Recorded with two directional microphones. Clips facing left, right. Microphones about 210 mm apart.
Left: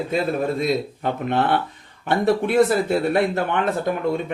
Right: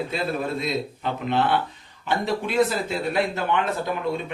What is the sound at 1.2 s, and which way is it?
Speech, 55° left (ahead or behind).